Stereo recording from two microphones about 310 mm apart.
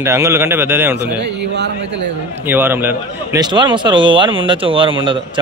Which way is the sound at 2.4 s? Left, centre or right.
Centre.